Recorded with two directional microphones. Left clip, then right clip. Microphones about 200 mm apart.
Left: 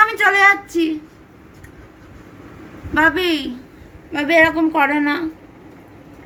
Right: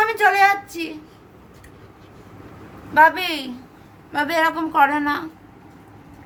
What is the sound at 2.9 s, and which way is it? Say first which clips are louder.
A woman's voice: right 1 dB; 15° right (ahead or behind).